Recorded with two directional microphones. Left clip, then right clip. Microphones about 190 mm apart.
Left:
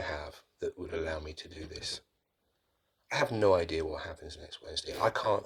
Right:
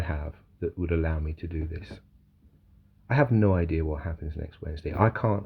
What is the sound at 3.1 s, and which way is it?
Speech, 20° left (ahead or behind).